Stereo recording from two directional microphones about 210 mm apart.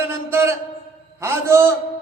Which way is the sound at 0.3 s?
10° right (ahead or behind).